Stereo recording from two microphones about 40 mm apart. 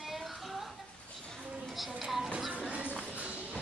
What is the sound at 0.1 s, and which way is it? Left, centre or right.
Music, centre.